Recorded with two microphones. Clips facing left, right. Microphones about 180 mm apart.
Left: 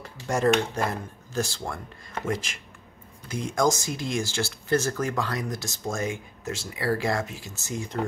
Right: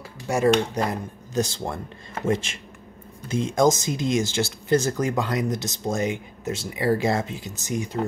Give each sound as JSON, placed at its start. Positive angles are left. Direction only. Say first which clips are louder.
{"t": 0.0, "sound": "dishes", "louder": "right 3 dB", "side_deg": -10}
{"t": 0.6, "sound": "speech", "louder": "right 3 dB", "side_deg": -15}